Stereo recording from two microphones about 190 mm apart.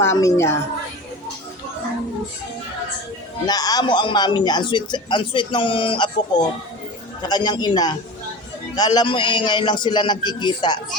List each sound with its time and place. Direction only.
0.0 s a woman's voice: 15° left (ahead or behind)
3.4 s speech: 20° left (ahead or behind)